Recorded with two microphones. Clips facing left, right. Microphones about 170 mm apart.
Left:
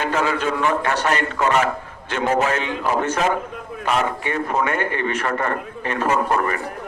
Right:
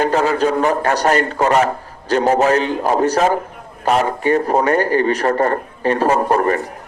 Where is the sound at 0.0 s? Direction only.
35° right (ahead or behind).